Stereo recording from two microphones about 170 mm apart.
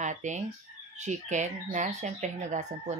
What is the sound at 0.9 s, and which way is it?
Speech, 45° right (ahead or behind).